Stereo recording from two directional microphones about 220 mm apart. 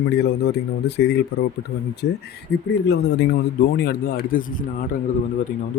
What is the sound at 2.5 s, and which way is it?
Speech, 50° left (ahead or behind).